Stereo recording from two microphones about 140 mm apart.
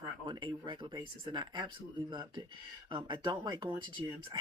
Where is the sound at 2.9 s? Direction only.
35° right (ahead or behind).